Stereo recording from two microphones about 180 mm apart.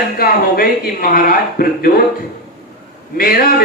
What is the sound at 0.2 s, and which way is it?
Speech, 55° left (ahead or behind).